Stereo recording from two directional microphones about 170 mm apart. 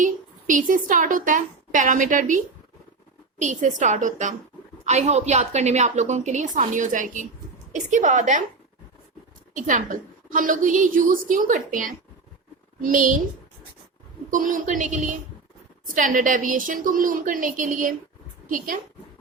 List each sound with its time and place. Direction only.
0.0 s a woman's voice: 50° right (ahead or behind)
9.6 s a woman's voice: 50° right (ahead or behind)
14.3 s a woman's voice: 50° right (ahead or behind)